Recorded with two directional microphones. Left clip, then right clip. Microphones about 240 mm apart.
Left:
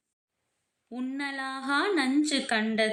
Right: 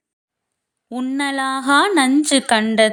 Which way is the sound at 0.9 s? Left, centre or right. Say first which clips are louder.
Right 12 dB; right.